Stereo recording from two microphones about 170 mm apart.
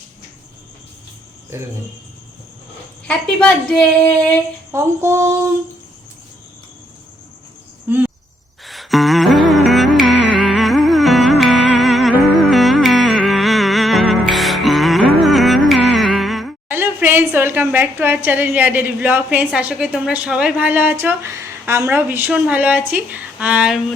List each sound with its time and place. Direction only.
1.5 s a woman's voice: 15° right (ahead or behind)
3.1 s a woman's voice: 5° left (ahead or behind)
4.7 s a woman's voice: 15° right (ahead or behind)
7.9 s cricket: 10° right (ahead or behind)
8.6 s music: centre (ahead or behind)
16.6 s a woman's voice: 10° right (ahead or behind)